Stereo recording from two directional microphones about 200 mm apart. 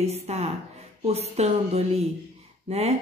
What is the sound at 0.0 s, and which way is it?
Speech, 30° right (ahead or behind).